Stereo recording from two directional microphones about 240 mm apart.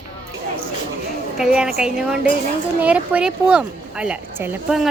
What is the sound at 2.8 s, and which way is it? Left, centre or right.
Speech, centre.